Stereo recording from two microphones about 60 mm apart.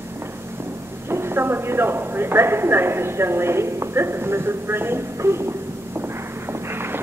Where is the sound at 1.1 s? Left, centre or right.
Right.